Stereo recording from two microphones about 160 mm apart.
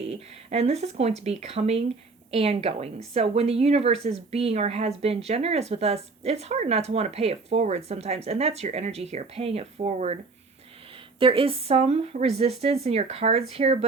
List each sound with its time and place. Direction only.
0.0 s a woman's voice: 40° right (ahead or behind)
11.2 s a woman's voice: 35° right (ahead or behind)